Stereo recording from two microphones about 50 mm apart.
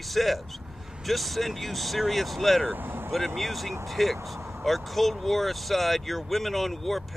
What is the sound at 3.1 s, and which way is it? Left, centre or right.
Speech, centre.